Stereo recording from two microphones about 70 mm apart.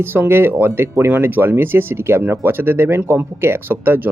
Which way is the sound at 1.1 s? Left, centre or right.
Right.